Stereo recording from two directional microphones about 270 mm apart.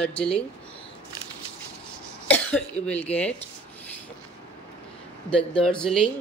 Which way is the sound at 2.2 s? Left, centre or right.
Centre.